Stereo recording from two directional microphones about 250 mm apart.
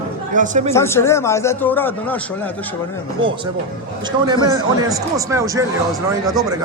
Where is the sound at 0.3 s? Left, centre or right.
Right.